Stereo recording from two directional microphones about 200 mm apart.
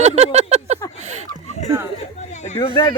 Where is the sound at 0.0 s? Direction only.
35° right (ahead or behind).